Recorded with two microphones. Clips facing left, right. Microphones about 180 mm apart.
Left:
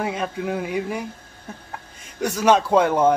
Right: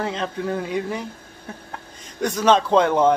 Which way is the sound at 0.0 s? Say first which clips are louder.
Even; 10° left (ahead or behind).